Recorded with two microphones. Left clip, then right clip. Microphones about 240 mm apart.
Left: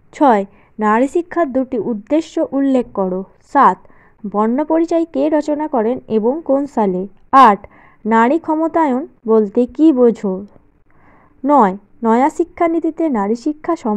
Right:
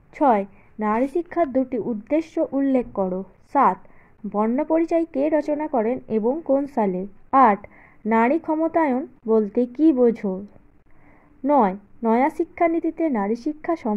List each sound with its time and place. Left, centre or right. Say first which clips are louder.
0.1 s a woman's voice: left 6 dB; left